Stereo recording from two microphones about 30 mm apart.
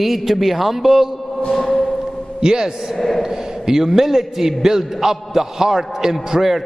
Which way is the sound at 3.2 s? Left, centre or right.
Centre.